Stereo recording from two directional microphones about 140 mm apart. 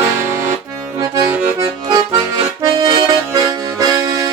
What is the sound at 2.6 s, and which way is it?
Accordion, 25° right (ahead or behind).